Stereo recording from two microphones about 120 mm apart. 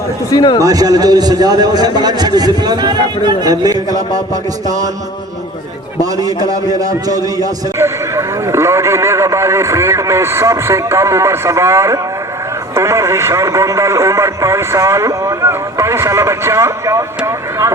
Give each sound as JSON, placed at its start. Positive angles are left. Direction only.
{"t": 0.3, "sound": "speech", "side_deg": 35}
{"t": 0.6, "sound": "a man's voice", "side_deg": -30}
{"t": 6.0, "sound": "a man's voice", "side_deg": -30}